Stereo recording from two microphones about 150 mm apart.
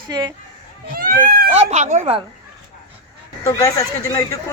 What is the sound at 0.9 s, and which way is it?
Speech, 75° right (ahead or behind).